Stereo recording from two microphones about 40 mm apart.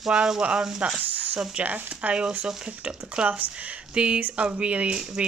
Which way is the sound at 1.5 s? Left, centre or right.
Right.